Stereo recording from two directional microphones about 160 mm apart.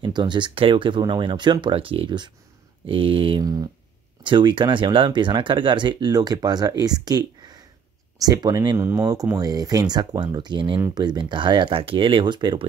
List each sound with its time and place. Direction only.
0.0 s speech: 30° right (ahead or behind)